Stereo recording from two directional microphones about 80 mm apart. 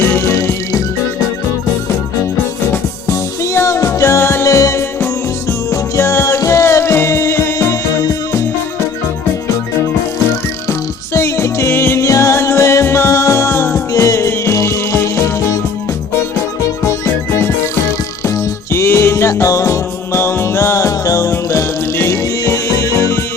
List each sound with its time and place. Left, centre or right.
0.0 s music: left
2.7 s music: left
10.7 s music: left
18.3 s music: left